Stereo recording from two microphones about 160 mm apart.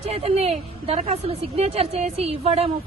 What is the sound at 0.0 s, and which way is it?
A woman's voice, 40° right (ahead or behind).